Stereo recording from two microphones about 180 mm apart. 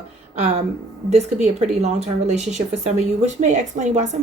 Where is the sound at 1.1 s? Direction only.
40° right (ahead or behind).